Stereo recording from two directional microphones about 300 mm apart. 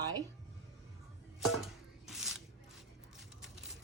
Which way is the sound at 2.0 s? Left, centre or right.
Centre.